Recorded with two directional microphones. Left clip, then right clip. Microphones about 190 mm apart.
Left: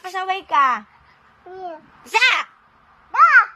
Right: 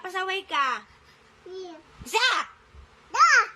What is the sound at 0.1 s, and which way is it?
Speech, centre (ahead or behind).